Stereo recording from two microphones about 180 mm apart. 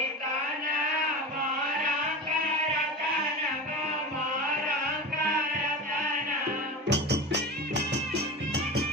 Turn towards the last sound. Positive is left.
turn(degrees=-70)  # may be behind; listen again after turning